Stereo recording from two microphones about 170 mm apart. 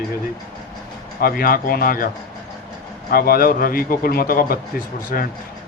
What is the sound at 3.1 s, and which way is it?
Speech, 60° left (ahead or behind).